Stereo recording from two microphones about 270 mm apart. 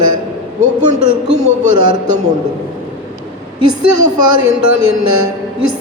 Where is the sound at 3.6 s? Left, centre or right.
Right.